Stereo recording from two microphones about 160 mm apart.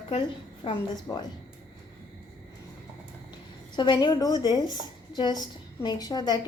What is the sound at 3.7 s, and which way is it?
A woman's voice, 30° left (ahead or behind).